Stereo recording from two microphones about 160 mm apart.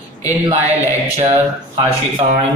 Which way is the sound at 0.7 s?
45° right (ahead or behind).